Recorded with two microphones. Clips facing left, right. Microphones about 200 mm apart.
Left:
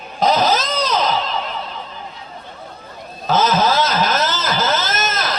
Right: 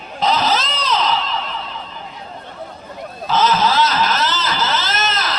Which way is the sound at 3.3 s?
45° left (ahead or behind).